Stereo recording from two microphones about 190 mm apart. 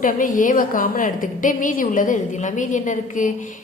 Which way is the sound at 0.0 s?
45° left (ahead or behind).